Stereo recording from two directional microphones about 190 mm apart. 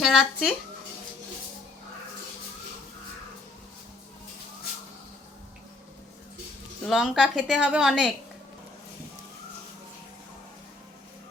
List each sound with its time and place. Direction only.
0.0 s a woman's voice: 5° right (ahead or behind)
6.8 s a woman's voice: centre (ahead or behind)